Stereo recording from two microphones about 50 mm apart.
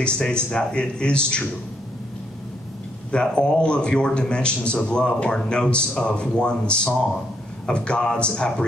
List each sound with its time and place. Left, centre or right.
0.0 s a man's voice: centre
3.1 s a man's voice: centre